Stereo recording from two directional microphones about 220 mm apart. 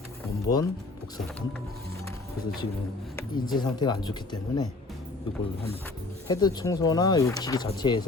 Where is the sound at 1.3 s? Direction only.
5° left (ahead or behind).